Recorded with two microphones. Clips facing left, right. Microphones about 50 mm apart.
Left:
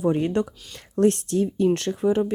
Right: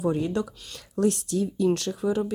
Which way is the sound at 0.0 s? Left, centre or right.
Left.